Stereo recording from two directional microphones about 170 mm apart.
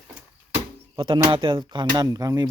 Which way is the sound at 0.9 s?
30° right (ahead or behind).